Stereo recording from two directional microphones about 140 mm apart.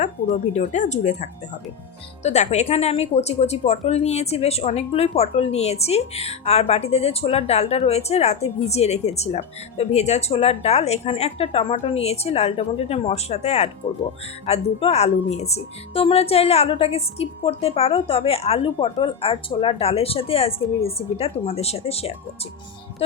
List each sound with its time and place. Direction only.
0.0 s speech: 60° left (ahead or behind)